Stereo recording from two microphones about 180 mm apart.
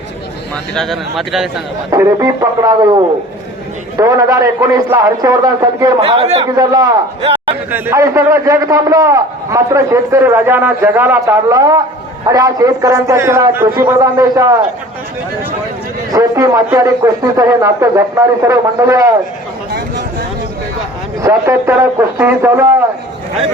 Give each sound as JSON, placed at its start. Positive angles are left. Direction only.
{"t": 0.7, "sound": "speech", "side_deg": 0}
{"t": 1.9, "sound": "a man's voice", "side_deg": -15}
{"t": 3.9, "sound": "a man's voice", "side_deg": -20}
{"t": 6.0, "sound": "a man's voice", "side_deg": -35}
{"t": 16.1, "sound": "a man's voice", "side_deg": -20}
{"t": 21.2, "sound": "a man's voice", "side_deg": -15}